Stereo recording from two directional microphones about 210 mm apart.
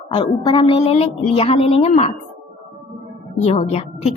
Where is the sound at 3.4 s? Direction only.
30° left (ahead or behind).